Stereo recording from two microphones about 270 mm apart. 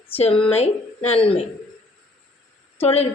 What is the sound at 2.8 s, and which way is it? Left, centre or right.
Speech, left.